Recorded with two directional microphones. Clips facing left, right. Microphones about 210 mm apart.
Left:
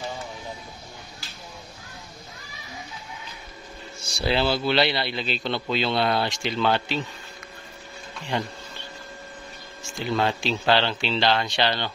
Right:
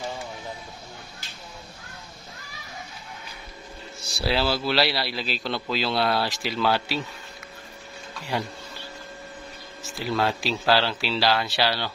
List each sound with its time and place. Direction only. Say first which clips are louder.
4.0 s a man's voice: left 1 dB; centre (ahead or behind)
8.3 s a man's voice: left 1 dB; 5° right (ahead or behind)
9.8 s a man's voice: left 1 dB; centre (ahead or behind)